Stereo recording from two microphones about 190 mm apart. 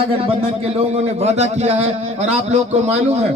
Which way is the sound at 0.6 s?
35° right (ahead or behind).